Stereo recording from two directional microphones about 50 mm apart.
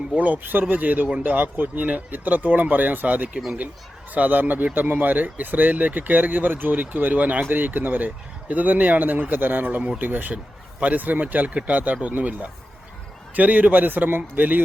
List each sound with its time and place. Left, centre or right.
0.2 s speech: right